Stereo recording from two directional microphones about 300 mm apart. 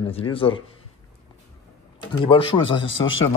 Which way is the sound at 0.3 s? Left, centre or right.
Centre.